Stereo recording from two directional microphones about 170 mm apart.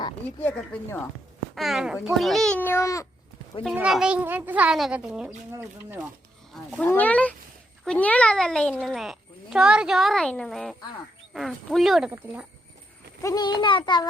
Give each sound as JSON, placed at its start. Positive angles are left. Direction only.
{"t": 0.4, "sound": "speech", "side_deg": 10}
{"t": 1.5, "sound": "speech", "side_deg": 0}
{"t": 3.8, "sound": "speech", "side_deg": -5}
{"t": 6.5, "sound": "speech", "side_deg": 10}
{"t": 13.2, "sound": "a child's voice", "side_deg": 25}